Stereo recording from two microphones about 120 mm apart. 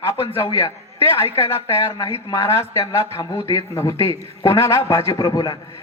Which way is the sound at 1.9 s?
30° left (ahead or behind).